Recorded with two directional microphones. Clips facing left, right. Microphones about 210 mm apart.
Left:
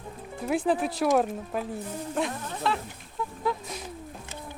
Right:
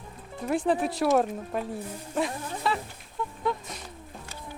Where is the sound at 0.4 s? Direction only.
5° left (ahead or behind).